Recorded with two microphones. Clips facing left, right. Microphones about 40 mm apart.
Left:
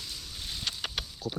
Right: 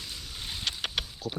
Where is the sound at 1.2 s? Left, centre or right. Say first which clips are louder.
Left 3 dB; right.